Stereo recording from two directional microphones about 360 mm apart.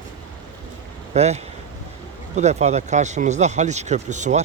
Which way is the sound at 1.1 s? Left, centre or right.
Centre.